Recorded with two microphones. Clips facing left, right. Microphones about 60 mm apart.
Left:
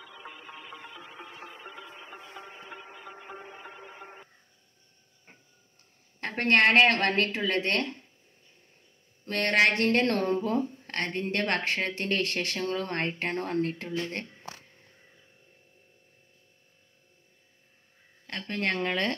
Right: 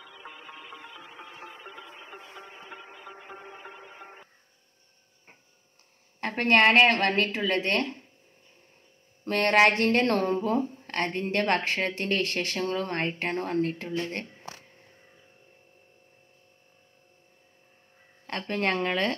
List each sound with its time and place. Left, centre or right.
6.2 s a woman's voice: centre
9.5 s a woman's voice: right
12.7 s a woman's voice: centre
13.8 s speech: right
18.2 s speech: right